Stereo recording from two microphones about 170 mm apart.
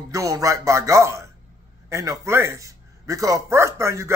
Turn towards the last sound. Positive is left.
turn(degrees=-15)  # may be behind; listen again after turning